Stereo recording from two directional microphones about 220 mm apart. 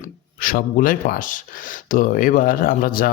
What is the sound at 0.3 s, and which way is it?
Speech, 40° left (ahead or behind).